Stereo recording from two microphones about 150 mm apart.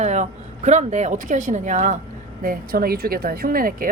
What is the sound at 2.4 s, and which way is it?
A woman's voice, 80° right.